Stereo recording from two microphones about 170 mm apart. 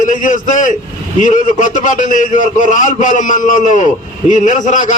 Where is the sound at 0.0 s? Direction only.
50° left (ahead or behind).